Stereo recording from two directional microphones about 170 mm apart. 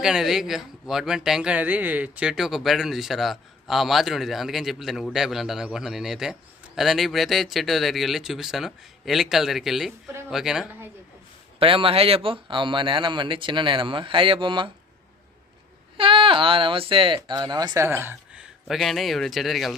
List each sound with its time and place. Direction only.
0.0 s speech: 5° right (ahead or behind)
11.6 s speech: 30° right (ahead or behind)
16.0 s speech: 30° right (ahead or behind); by 19.7 s centre (ahead or behind)